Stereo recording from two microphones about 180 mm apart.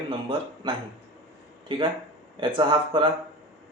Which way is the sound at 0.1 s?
25° right (ahead or behind).